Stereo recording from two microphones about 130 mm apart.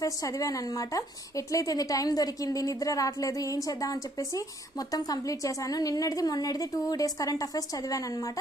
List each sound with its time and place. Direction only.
0.0 s a woman's voice: 25° left (ahead or behind)